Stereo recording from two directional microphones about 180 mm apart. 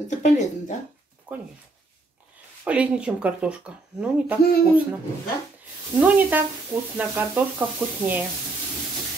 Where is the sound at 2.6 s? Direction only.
5° right (ahead or behind).